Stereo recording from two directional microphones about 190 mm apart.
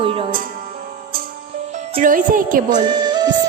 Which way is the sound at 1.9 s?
45° right (ahead or behind).